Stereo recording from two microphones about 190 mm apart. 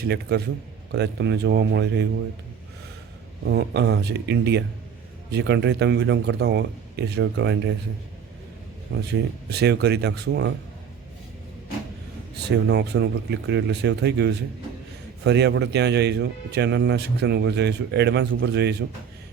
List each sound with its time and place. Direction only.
0.0 s speech: 60° right (ahead or behind)
3.4 s speech: 60° right (ahead or behind)
8.9 s speech: 65° right (ahead or behind)
12.5 s speech: 65° right (ahead or behind)